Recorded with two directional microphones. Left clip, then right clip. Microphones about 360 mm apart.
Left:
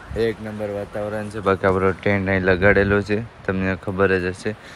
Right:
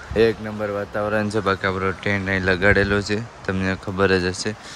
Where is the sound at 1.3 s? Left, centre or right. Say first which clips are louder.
Left 2 dB; centre.